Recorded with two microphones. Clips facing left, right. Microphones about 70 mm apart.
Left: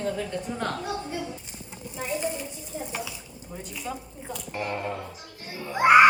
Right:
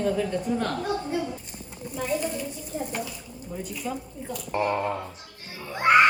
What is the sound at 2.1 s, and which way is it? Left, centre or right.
Speech, right.